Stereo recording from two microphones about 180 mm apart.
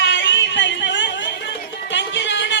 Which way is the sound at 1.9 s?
80° left.